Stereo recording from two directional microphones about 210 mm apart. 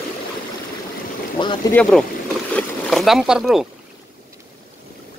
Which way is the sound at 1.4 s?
20° left (ahead or behind).